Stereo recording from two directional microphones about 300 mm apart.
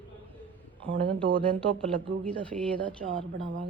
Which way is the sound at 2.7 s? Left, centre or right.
Right.